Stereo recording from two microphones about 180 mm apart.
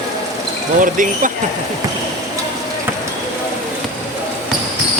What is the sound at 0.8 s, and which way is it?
Speech, 45° right (ahead or behind).